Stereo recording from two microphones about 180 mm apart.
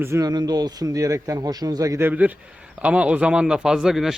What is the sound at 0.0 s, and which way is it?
A man's voice, 15° right (ahead or behind).